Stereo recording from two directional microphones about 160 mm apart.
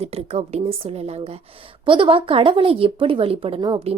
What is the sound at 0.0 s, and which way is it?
Speech, 40° right (ahead or behind).